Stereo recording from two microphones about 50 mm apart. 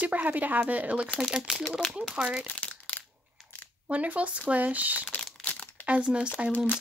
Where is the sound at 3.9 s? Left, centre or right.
Right.